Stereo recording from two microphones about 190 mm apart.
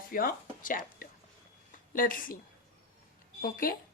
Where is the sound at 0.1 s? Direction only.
50° left (ahead or behind).